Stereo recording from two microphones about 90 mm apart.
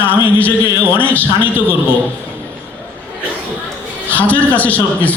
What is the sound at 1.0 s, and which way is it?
Speech, 20° left (ahead or behind).